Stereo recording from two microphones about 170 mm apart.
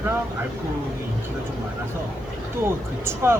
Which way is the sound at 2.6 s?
15° right (ahead or behind).